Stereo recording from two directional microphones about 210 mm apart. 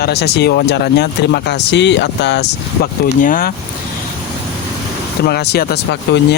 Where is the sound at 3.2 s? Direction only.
45° left (ahead or behind).